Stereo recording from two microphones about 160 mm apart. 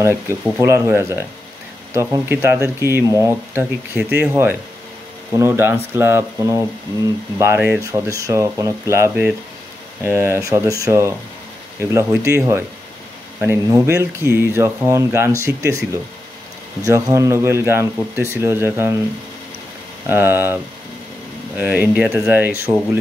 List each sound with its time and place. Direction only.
0.0 s speech: 15° right (ahead or behind)
20.1 s speech: 15° right (ahead or behind)